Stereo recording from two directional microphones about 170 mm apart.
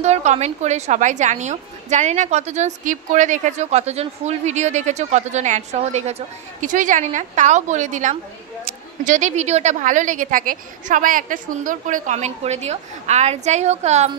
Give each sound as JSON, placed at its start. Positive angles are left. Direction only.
{"t": 0.0, "sound": "a woman's voice", "side_deg": -40}